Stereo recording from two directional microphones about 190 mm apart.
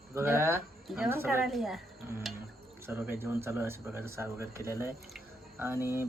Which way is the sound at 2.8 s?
10° right (ahead or behind).